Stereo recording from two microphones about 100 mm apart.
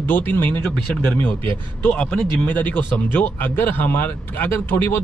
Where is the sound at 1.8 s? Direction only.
20° left (ahead or behind).